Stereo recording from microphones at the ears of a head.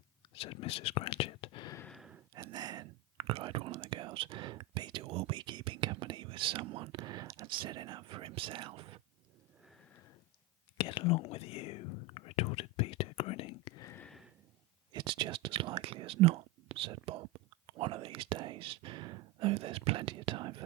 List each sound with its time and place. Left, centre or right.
0.3 s speech: left
2.0 s whispering: right
10.8 s whispering: left
14.9 s whispering: right